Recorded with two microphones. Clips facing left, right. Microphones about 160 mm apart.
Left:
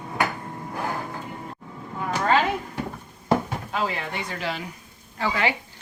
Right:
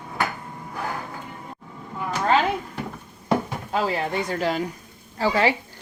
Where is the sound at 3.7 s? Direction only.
35° right (ahead or behind).